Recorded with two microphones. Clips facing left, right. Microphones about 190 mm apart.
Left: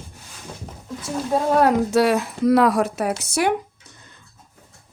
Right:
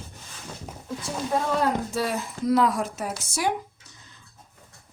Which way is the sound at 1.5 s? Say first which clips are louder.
Left 8 dB; 70° left (ahead or behind).